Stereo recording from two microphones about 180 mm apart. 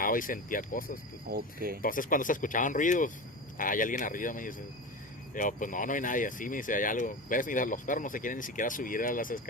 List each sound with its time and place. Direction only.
0.0 s speech: 50° left (ahead or behind)
1.3 s speech: 55° right (ahead or behind)
1.8 s speech: 50° left (ahead or behind)